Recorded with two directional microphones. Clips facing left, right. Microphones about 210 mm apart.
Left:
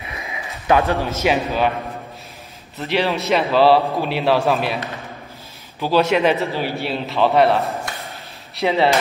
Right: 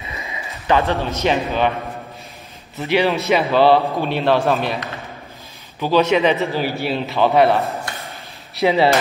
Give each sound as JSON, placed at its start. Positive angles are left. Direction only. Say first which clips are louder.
{"t": 0.2, "sound": "a sound", "louder": "even", "side_deg": 15}
{"t": 1.2, "sound": "a man's voice", "louder": "right 1 dB", "side_deg": 5}
{"t": 2.8, "sound": "a man's voice", "louder": "right 3 dB", "side_deg": 0}
{"t": 5.8, "sound": "a man's voice", "louder": "right 1 dB", "side_deg": 5}